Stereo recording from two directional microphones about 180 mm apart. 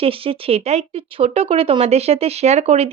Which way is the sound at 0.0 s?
30° right (ahead or behind).